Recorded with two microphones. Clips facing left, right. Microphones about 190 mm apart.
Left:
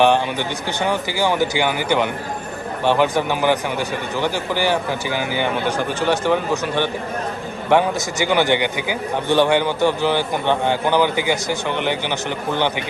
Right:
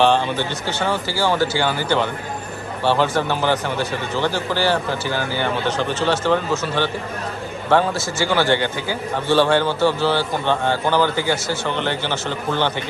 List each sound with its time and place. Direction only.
0.0 s a man's voice: 15° left (ahead or behind)